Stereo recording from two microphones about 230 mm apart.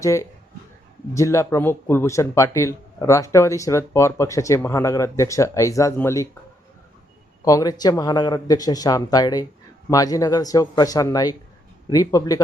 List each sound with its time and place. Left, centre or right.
0.0 s speech: centre
7.4 s speech: centre